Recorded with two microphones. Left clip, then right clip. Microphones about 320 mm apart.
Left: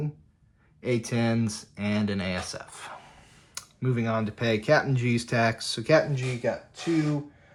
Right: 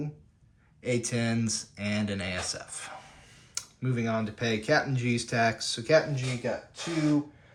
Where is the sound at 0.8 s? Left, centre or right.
Centre.